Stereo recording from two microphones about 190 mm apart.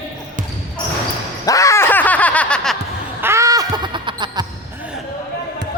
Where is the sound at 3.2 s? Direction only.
15° right (ahead or behind).